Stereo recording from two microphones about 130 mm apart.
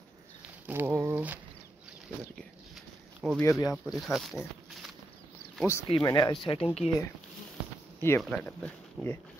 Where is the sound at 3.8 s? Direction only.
Centre (ahead or behind).